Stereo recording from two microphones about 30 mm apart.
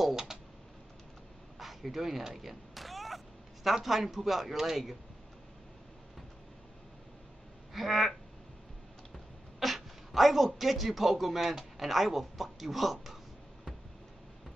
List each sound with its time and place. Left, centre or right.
0.0 s typing: centre
1.6 s a sound: centre
3.8 s speech: centre
7.7 s quack: centre
9.1 s a sound: centre
11.7 s speech: centre